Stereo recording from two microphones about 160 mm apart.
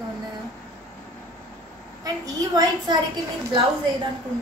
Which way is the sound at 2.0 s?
25° right (ahead or behind).